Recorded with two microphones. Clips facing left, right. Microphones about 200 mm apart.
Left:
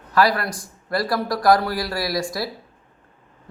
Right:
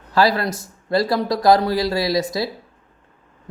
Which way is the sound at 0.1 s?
25° right (ahead or behind).